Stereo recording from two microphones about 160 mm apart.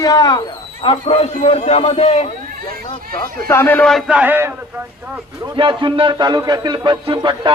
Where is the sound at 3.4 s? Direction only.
15° left (ahead or behind); by 4.5 s 15° right (ahead or behind).